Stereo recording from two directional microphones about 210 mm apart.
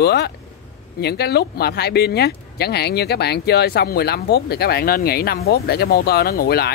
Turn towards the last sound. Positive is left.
turn(degrees=50)  # may be behind; listen again after turning